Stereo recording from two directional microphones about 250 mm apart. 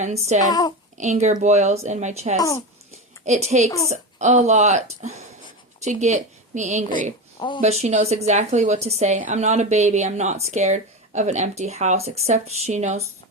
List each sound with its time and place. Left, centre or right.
0.0 s a woman's voice: right
0.4 s a woman's voice: centre
0.9 s a woman's voice: right
2.4 s a woman's voice: centre
3.2 s a woman's voice: right
7.3 s speech: centre
7.6 s a woman's voice: right